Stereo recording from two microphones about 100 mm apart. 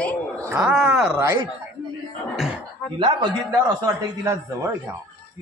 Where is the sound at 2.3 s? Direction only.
5° right (ahead or behind).